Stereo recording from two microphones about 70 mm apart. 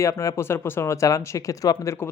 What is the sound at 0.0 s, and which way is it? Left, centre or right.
Speech, left.